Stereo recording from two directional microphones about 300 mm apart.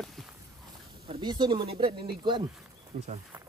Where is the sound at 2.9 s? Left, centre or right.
Right.